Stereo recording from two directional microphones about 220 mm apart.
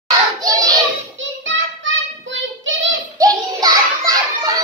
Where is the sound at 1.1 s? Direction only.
60° right (ahead or behind).